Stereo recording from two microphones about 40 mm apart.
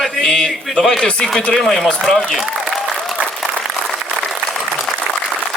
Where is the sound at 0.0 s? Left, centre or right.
Centre.